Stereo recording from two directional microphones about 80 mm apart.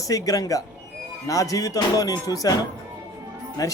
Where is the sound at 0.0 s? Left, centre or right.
Left.